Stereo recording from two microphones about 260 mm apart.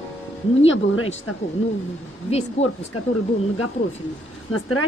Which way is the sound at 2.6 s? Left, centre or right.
Left.